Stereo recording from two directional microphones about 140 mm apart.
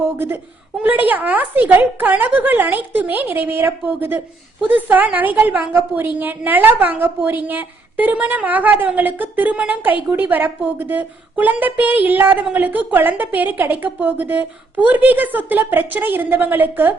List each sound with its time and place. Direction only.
0.8 s a woman's voice: 10° right (ahead or behind)